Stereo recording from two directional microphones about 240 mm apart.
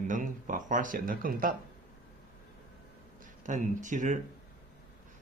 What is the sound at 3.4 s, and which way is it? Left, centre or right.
Speech, right.